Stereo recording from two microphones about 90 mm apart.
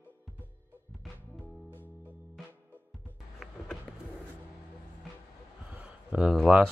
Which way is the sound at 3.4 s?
Centre (ahead or behind).